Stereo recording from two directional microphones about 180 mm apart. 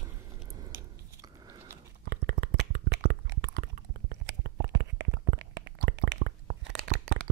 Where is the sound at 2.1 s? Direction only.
60° right (ahead or behind).